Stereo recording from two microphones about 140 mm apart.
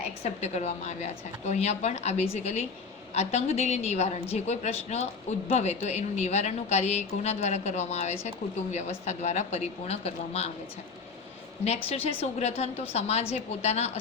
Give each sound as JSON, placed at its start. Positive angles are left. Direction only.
{"t": 0.2, "sound": "a woman's voice", "side_deg": 50}
{"t": 11.6, "sound": "a woman's voice", "side_deg": 45}